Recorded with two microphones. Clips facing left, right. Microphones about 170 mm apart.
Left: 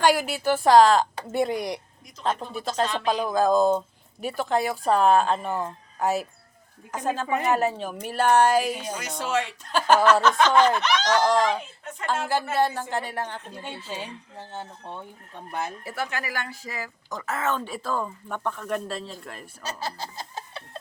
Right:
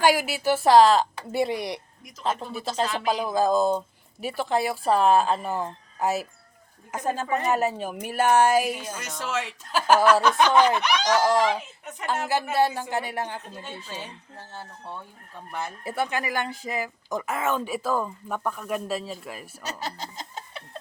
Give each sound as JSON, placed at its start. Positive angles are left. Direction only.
{"t": 0.0, "sound": "speech", "side_deg": -5}
{"t": 7.5, "sound": "speech", "side_deg": -10}
{"t": 13.5, "sound": "speech", "side_deg": 15}
{"t": 15.8, "sound": "speech", "side_deg": -20}